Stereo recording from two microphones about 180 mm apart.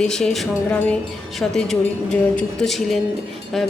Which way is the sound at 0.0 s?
5° left (ahead or behind).